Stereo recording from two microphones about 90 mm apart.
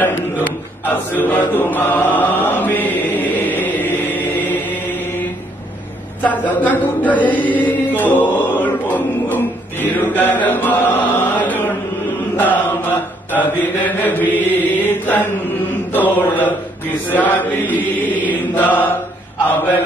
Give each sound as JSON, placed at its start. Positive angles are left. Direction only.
{"t": 1.1, "sound": "chant", "side_deg": 20}
{"t": 6.2, "sound": "chant", "side_deg": 20}
{"t": 12.4, "sound": "mantra", "side_deg": 20}
{"t": 18.3, "sound": "chant", "side_deg": 20}